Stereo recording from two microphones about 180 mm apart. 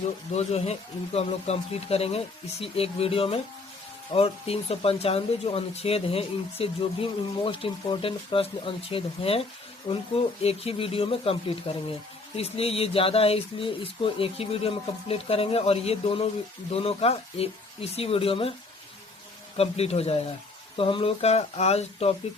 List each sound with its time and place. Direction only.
0.3 s speech: 35° left (ahead or behind)
19.5 s speech: 35° left (ahead or behind)